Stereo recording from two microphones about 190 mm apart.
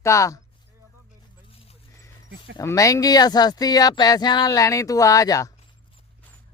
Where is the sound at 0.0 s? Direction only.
15° left (ahead or behind).